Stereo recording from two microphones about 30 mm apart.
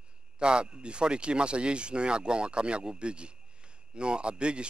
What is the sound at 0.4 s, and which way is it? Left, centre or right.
Speech, right.